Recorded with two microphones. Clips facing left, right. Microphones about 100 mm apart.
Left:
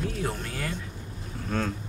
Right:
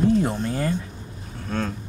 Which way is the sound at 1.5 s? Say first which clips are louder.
Right 2 dB; centre (ahead or behind).